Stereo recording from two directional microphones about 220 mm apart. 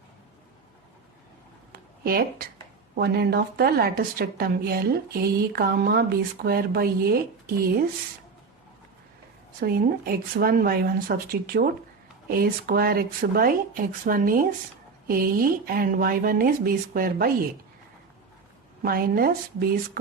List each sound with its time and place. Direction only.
1.7 s a sound: 45° right (ahead or behind)
2.9 s a woman's voice: 45° right (ahead or behind)
9.6 s a woman's voice: 45° right (ahead or behind)
18.8 s a woman's voice: 40° right (ahead or behind)